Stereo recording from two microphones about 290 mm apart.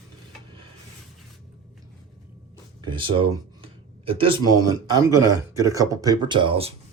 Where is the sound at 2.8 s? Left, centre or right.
Centre.